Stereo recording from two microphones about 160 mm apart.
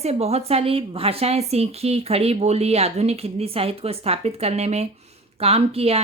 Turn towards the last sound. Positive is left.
turn(degrees=-40)  # may be behind; listen again after turning